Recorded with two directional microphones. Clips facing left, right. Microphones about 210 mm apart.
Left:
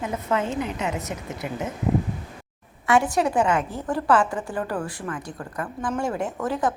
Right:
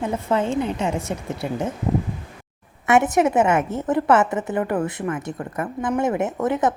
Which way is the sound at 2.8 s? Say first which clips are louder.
Right 3 dB; 20° right (ahead or behind).